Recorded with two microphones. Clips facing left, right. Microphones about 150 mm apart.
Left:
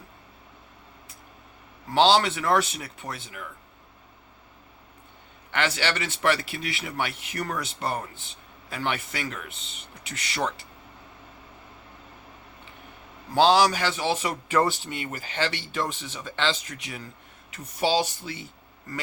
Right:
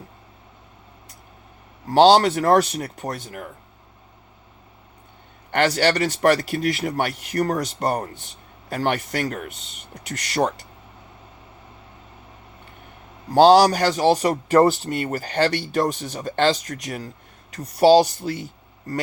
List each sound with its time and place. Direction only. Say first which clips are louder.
1.9 s speech: right 6 dB; 40° right (ahead or behind)
5.5 s speech: right 8 dB; 45° right (ahead or behind)
13.3 s speech: right 7 dB; 40° right (ahead or behind)